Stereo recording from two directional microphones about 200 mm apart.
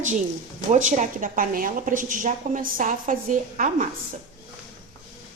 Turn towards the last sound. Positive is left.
turn(degrees=-40)  # may be behind; listen again after turning